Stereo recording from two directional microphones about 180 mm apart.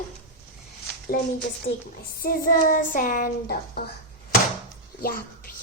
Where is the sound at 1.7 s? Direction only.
90° left.